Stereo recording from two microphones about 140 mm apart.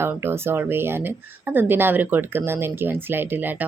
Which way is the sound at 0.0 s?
15° right (ahead or behind).